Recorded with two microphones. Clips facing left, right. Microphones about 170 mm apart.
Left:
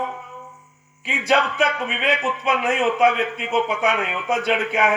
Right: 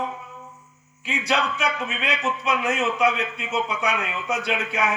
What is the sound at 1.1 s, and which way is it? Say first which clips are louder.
A man's voice: left 4 dB; 55° left (ahead or behind).